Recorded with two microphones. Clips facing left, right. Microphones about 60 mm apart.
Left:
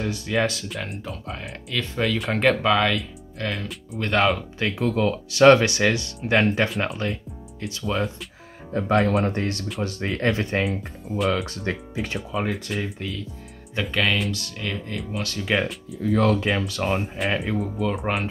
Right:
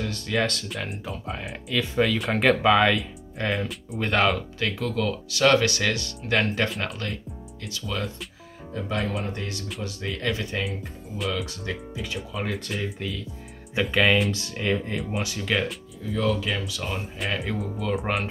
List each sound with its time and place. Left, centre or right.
0.0 s speech: centre
4.6 s speech: left
8.7 s speech: left
10.6 s speech: left
12.4 s speech: centre
14.3 s speech: right
15.1 s speech: centre
15.4 s speech: centre
15.9 s speech: left
17.6 s speech: centre